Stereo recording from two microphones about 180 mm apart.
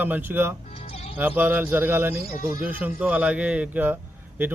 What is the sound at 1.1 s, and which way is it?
Speech, 10° right (ahead or behind).